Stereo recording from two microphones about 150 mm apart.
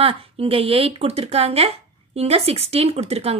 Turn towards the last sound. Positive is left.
turn(degrees=-45)  # may be behind; listen again after turning